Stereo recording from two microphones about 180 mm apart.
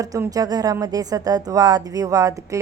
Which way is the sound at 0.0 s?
20° right (ahead or behind).